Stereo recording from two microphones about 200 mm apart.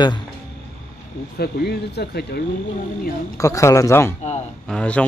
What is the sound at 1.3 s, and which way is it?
Speech, 55° left (ahead or behind).